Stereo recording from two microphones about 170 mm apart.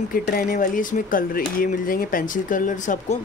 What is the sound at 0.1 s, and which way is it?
Speech, 55° left (ahead or behind).